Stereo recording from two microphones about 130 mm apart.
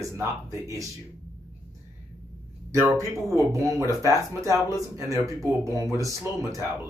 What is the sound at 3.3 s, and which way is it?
Speech, 25° right (ahead or behind).